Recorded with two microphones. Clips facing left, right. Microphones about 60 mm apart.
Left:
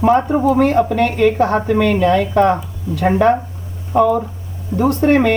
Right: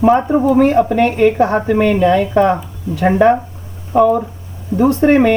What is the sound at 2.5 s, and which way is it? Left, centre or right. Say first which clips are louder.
Speech: right 1 dB; centre.